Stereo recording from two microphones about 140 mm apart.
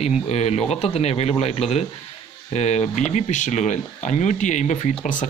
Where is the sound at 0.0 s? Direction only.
50° left (ahead or behind).